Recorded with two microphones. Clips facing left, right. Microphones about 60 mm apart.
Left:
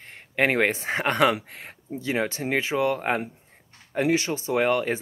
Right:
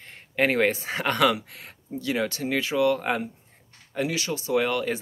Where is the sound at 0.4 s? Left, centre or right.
Left.